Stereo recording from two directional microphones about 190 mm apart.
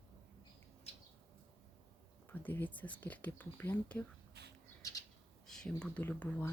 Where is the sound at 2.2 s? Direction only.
10° left (ahead or behind).